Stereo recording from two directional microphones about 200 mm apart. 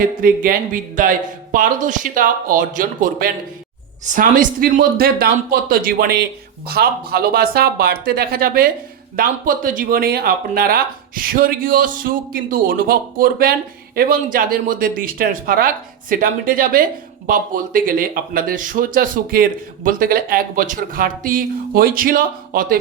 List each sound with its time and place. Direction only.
0.0 s speech: 45° right (ahead or behind)